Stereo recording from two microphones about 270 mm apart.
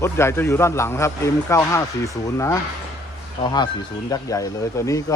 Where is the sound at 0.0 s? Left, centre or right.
Centre.